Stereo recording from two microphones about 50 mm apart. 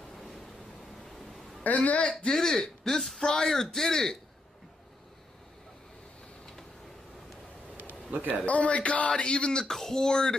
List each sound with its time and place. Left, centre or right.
0.1 s waves: centre
1.0 s quack: centre
1.6 s speech: left
2.2 s speech: centre
8.5 s speech: left